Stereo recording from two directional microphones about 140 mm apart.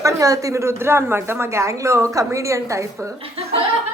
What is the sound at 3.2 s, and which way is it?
Speech, 45° right (ahead or behind).